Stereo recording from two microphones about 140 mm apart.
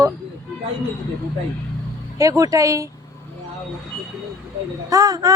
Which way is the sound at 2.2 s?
25° right (ahead or behind).